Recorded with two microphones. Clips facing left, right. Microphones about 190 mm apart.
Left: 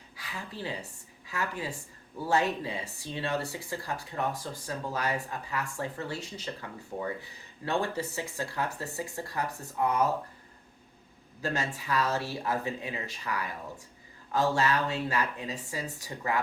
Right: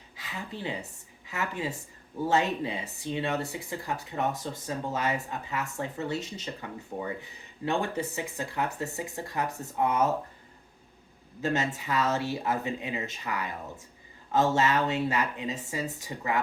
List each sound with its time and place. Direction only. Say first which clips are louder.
0.2 s speech: right 2 dB; 20° right (ahead or behind)
11.4 s speech: right 3 dB; 20° right (ahead or behind)